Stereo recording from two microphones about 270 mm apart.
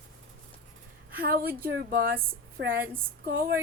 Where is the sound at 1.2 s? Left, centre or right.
Right.